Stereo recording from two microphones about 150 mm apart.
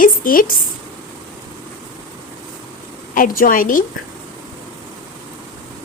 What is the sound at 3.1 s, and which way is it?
Speech, 70° left (ahead or behind).